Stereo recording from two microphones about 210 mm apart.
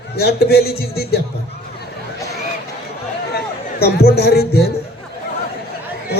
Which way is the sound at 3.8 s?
50° left (ahead or behind).